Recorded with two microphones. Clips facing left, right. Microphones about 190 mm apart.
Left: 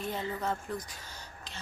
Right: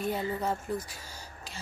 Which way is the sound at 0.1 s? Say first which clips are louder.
Right 3 dB; 10° right (ahead or behind).